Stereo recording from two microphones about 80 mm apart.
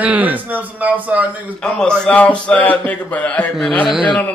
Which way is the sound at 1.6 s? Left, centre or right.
Centre.